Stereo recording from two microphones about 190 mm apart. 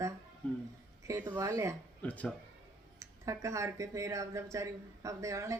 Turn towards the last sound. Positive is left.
turn(degrees=-15)  # may be behind; listen again after turning